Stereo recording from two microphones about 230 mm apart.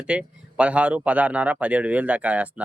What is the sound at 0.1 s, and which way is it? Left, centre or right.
Speech, centre.